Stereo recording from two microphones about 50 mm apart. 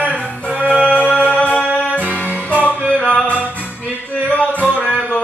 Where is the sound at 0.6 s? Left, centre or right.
Right.